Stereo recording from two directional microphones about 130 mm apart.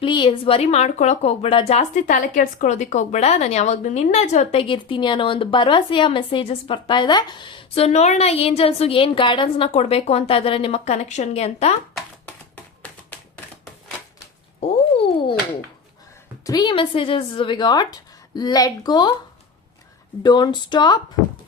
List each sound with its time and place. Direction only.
0.0 s a woman's voice: 40° left (ahead or behind); by 4.6 s 60° left (ahead or behind)
4.7 s a woman's voice: 40° left (ahead or behind)
9.6 s speech: 55° left (ahead or behind)
14.6 s a sound: 50° left (ahead or behind)
16.4 s a woman's voice: 30° left (ahead or behind)
20.2 s a woman's voice: 35° left (ahead or behind)